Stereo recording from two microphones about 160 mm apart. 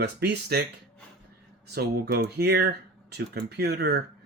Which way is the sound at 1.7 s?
80° right.